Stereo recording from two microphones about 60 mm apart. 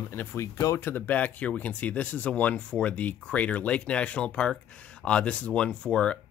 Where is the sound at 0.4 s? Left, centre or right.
Left.